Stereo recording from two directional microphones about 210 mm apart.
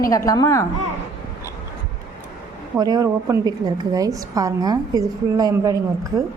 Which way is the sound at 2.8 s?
15° right (ahead or behind).